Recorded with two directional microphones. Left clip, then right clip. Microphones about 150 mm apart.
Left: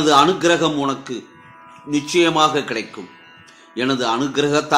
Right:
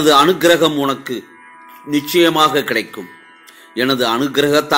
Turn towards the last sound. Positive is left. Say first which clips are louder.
# right 4 dB
turn(degrees=-25)  # may be behind; listen again after turning